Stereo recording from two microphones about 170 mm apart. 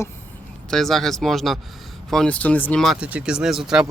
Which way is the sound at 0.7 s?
Centre (ahead or behind).